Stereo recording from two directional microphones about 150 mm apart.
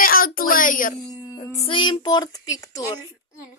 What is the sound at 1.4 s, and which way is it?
Speech, 45° left (ahead or behind).